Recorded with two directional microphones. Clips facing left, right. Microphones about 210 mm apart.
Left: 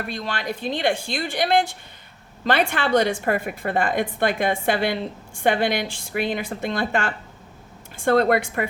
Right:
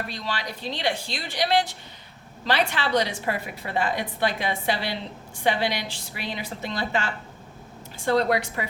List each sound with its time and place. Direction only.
0.1 s a woman's voice: 50° left (ahead or behind)